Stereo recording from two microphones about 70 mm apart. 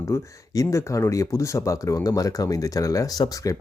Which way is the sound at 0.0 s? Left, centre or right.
Left.